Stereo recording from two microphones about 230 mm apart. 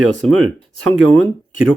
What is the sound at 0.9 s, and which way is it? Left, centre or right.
Speech, right.